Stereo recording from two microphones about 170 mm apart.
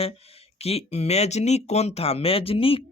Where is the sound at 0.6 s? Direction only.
35° left (ahead or behind).